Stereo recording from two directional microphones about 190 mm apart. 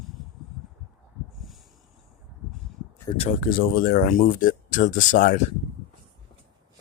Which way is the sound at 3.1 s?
30° left (ahead or behind).